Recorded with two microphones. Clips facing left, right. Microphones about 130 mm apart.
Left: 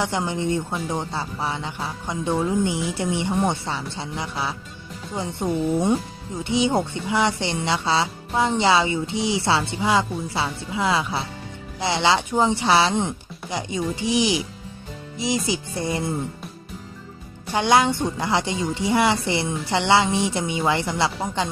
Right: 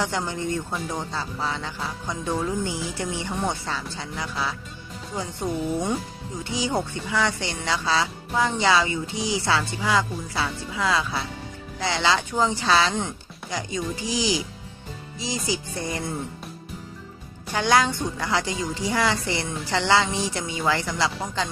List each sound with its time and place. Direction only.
0.0 s speech: 20° left (ahead or behind)
17.5 s speech: 20° left (ahead or behind)